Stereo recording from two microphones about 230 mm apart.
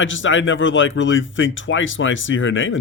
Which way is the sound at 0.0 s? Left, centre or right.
Left.